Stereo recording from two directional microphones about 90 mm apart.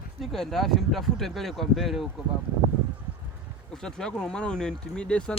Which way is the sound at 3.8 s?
5° left (ahead or behind).